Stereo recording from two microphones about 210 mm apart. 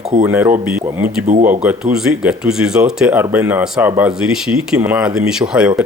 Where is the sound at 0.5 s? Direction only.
35° right (ahead or behind).